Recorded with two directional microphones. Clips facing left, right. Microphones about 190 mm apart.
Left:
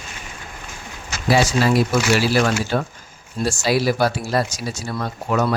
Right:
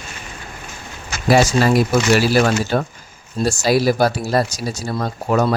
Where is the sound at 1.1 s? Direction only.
50° right (ahead or behind).